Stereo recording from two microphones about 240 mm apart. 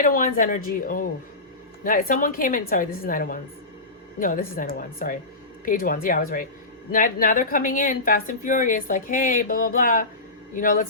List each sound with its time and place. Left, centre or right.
0.0 s speech: left